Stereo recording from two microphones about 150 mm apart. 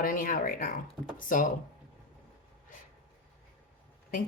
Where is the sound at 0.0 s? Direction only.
70° left (ahead or behind).